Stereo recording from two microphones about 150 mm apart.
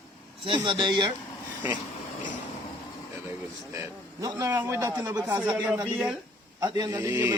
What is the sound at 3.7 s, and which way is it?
A man's voice, 20° right (ahead or behind).